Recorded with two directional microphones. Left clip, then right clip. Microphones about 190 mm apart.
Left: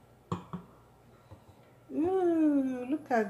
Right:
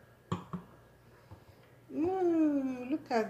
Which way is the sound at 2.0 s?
35° left (ahead or behind).